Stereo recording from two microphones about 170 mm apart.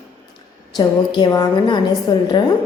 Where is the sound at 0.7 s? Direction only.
25° left (ahead or behind).